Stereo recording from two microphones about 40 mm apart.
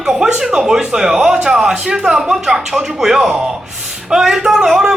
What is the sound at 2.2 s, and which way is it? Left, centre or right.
Speech, centre.